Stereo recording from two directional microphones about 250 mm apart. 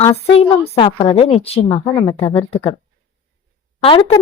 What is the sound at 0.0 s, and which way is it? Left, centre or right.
Speech, centre.